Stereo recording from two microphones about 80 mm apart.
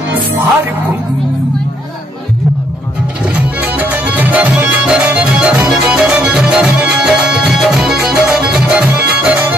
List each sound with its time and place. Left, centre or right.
3.3 s music: centre